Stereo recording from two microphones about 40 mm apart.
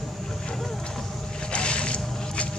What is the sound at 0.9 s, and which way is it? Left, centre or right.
Boat, centre.